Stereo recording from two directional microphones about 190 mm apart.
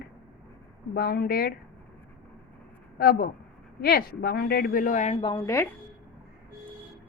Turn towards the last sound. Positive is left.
turn(degrees=15)  # may be behind; listen again after turning